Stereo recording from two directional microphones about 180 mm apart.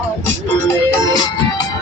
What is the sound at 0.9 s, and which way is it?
Music, 20° left (ahead or behind).